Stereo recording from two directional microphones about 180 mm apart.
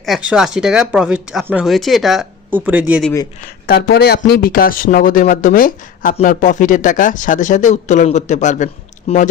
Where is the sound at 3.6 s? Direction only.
60° left (ahead or behind).